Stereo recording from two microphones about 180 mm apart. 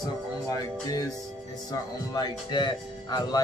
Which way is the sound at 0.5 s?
20° left (ahead or behind).